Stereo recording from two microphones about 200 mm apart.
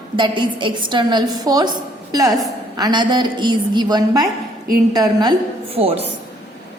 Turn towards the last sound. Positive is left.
turn(degrees=-30)  # may be behind; listen again after turning